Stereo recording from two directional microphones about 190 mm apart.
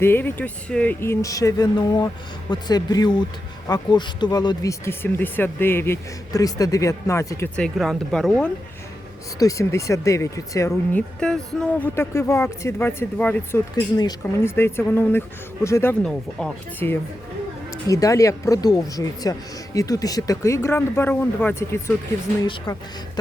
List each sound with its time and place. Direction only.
0.0 s speech: 10° left (ahead or behind)
9.4 s speech: 15° left (ahead or behind)
11.2 s speech: 5° left (ahead or behind)
14.0 s speech: 20° left (ahead or behind)